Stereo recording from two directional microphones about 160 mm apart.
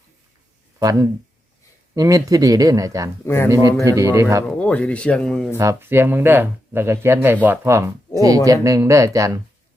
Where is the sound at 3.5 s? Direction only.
20° right (ahead or behind).